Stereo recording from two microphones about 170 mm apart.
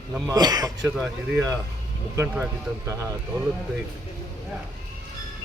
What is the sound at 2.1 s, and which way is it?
Speech, 10° right (ahead or behind).